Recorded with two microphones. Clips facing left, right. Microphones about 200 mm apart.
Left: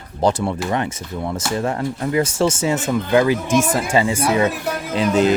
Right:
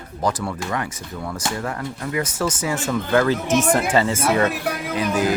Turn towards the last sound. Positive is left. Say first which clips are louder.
# left 4 dB
turn(degrees=25)  # may be behind; listen again after turning